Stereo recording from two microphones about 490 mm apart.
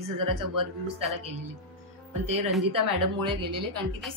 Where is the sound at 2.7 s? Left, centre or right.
Right.